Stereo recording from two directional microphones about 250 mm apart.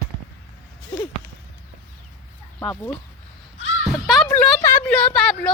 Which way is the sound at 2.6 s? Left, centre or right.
Centre.